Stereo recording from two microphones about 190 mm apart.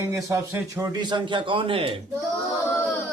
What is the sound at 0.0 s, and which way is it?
A man's voice, 15° right (ahead or behind).